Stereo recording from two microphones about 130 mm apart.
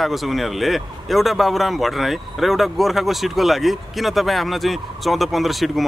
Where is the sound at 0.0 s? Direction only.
Centre (ahead or behind).